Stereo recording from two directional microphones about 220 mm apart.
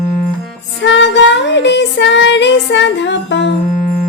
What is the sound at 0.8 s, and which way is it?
Music, 55° left (ahead or behind).